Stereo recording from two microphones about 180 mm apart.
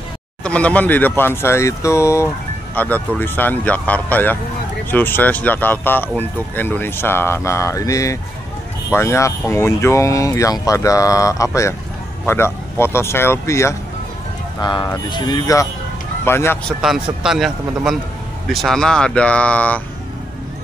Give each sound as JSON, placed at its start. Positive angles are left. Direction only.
{"t": 0.4, "sound": "speech", "side_deg": 5}
{"t": 16.8, "sound": "speech", "side_deg": 0}